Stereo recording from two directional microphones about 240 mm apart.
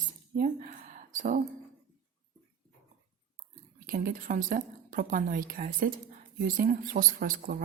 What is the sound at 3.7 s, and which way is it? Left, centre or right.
A woman's voice, right.